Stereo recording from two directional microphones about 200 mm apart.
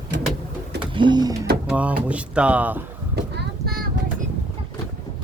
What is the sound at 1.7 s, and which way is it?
Speech, 5° right (ahead or behind).